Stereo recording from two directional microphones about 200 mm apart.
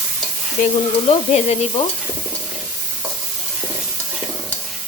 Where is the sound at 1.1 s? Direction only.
30° left (ahead or behind).